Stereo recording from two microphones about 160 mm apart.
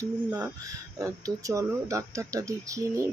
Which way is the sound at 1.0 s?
20° right (ahead or behind).